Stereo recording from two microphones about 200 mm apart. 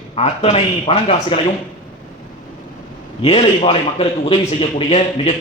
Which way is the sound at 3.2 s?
30° left (ahead or behind).